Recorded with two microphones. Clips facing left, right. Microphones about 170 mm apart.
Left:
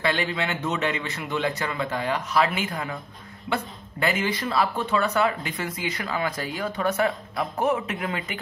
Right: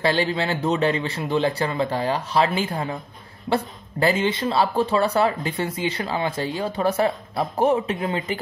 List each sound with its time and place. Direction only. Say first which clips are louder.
0.0 s a man's voice: right 4 dB; 30° right (ahead or behind)